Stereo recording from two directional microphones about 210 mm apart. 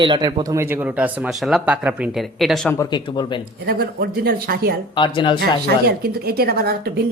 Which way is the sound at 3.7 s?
45° right (ahead or behind).